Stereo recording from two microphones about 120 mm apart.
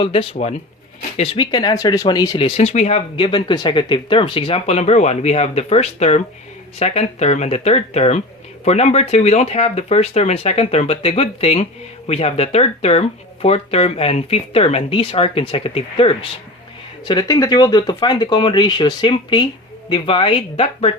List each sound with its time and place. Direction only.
0.0 s speech: 45° left (ahead or behind)
1.5 s speech: 35° left (ahead or behind)
2.4 s speech: 65° left (ahead or behind)
3.2 s speech: 45° left (ahead or behind)
17.1 s speech: 35° left (ahead or behind); by 20.9 s 50° left (ahead or behind)